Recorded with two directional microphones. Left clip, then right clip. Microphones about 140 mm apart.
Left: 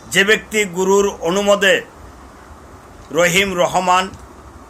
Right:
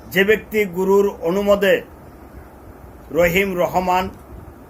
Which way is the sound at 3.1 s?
15° left (ahead or behind).